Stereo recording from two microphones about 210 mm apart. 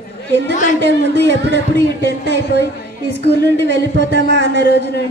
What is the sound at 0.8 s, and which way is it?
Speech, 55° right (ahead or behind).